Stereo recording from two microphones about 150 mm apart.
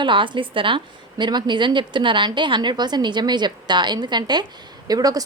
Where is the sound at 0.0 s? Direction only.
35° right (ahead or behind).